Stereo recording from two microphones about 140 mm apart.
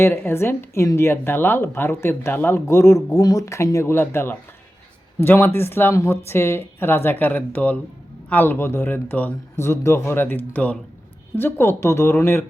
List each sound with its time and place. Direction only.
0.0 s a woman's voice: 15° left (ahead or behind)